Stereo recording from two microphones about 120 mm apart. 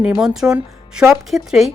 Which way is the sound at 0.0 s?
5° right (ahead or behind).